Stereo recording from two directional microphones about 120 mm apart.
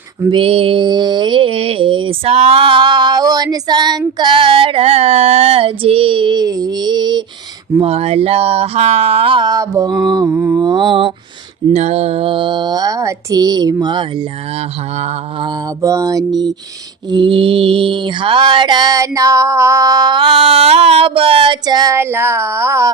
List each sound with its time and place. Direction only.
0.3 s mantra: 50° right (ahead or behind)
4.2 s female singing: 40° right (ahead or behind)
7.8 s speech: 55° right (ahead or behind)
9.5 s mantra: 30° right (ahead or behind)
10.2 s mantra: 15° right (ahead or behind)
10.6 s mantra: 40° right (ahead or behind)
11.7 s mantra: 65° right (ahead or behind); by 14.3 s 40° right (ahead or behind)
15.8 s speech: 25° right (ahead or behind)
17.1 s mantra: 45° right (ahead or behind)
21.9 s speech: 20° right (ahead or behind)